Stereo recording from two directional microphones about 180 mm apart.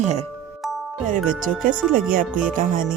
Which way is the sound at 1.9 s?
50° right (ahead or behind).